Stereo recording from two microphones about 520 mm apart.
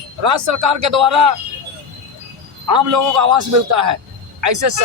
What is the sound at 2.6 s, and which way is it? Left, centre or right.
Speech, right.